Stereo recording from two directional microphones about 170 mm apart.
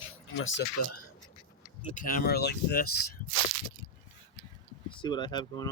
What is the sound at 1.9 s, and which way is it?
Speech, 50° left (ahead or behind).